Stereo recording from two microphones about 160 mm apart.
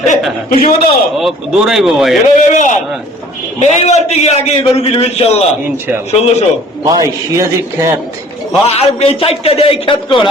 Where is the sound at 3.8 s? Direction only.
45° left (ahead or behind).